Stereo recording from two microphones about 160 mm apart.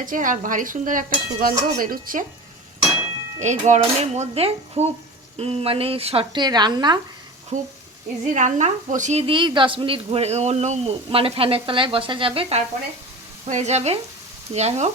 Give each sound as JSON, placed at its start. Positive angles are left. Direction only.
{"t": 0.0, "sound": "dishes", "side_deg": -55}
{"t": 3.4, "sound": "speech", "side_deg": -45}
{"t": 7.5, "sound": "speech", "side_deg": -45}